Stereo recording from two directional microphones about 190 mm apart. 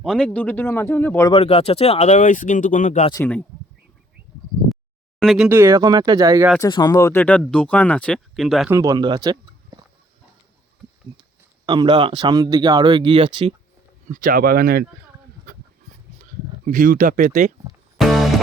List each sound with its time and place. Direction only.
0.0 s speech: centre (ahead or behind)
1.3 s speech: 30° left (ahead or behind)
3.1 s speech: 15° left (ahead or behind)
5.2 s speech: centre (ahead or behind)
5.5 s speech: 10° right (ahead or behind)
6.6 s speech: 20° left (ahead or behind); by 8.7 s centre (ahead or behind)
8.7 s speech: 20° right (ahead or behind)
11.6 s speech: 20° right (ahead or behind)
14.1 s speech: 45° right (ahead or behind)
16.7 s speech: 45° right (ahead or behind)
17.9 s music: centre (ahead or behind)